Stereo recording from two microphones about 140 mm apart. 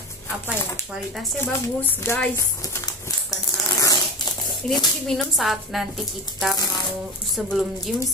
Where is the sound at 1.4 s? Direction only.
15° left (ahead or behind).